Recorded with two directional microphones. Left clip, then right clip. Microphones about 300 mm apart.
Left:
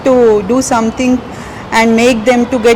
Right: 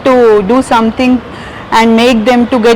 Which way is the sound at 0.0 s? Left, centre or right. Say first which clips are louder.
Right 2 dB; centre.